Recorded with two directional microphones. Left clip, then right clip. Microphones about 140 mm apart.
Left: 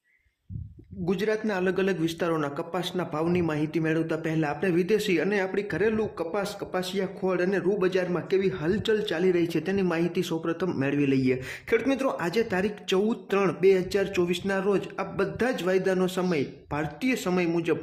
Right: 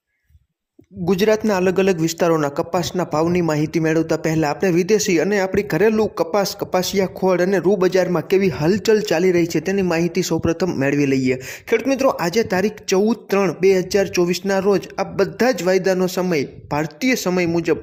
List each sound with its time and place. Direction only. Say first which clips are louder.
1.0 s speech: right 10 dB; 50° right (ahead or behind); by 17.7 s 35° right (ahead or behind)